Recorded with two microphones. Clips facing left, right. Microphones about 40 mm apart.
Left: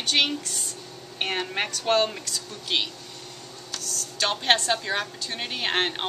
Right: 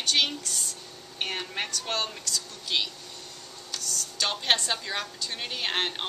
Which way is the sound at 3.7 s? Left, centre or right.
Centre.